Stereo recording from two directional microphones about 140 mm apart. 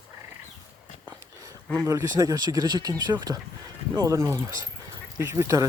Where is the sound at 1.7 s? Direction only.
20° right (ahead or behind).